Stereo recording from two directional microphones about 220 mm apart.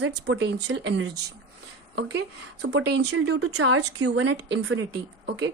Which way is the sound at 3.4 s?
75° right (ahead or behind).